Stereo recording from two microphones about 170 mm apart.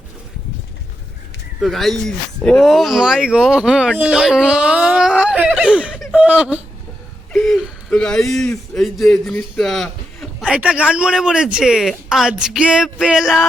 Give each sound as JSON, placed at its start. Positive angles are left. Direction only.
{"t": 1.6, "sound": "speech", "side_deg": 0}
{"t": 7.3, "sound": "a man's voice", "side_deg": 5}